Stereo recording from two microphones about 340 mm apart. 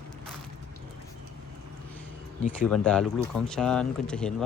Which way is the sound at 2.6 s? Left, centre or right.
Centre.